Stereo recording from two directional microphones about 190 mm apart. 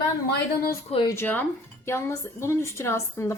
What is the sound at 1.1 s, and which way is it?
Speech, 10° left (ahead or behind).